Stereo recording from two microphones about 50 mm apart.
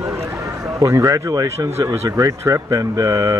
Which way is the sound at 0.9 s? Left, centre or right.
Right.